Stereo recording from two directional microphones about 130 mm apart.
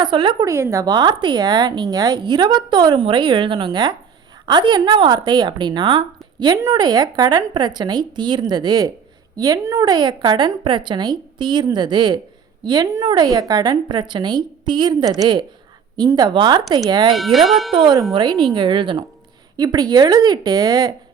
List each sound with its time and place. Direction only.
0.0 s speech: 40° right (ahead or behind)
0.4 s a woman's voice: 20° right (ahead or behind)
17.2 s speech: centre (ahead or behind)
18.1 s speech: 35° right (ahead or behind)